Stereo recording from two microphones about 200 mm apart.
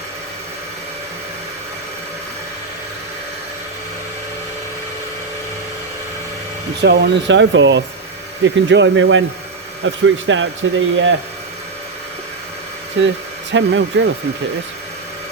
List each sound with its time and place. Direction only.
6.8 s speech: 60° right (ahead or behind)
13.0 s speech: 65° right (ahead or behind)